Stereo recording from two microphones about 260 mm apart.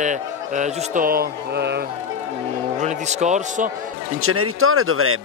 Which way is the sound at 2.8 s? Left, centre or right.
Right.